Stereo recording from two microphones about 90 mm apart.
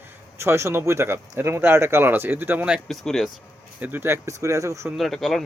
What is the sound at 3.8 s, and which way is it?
Speech, 20° right (ahead or behind).